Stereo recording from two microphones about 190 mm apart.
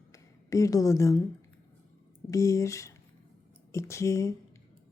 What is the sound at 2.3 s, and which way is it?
A woman's voice, 15° left (ahead or behind).